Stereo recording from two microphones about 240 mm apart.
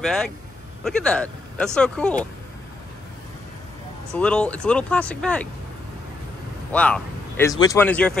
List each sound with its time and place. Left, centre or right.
0.0 s speech: centre
4.1 s speech: centre
6.7 s speech: centre